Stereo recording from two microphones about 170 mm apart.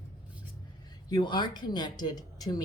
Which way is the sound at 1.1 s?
25° left (ahead or behind).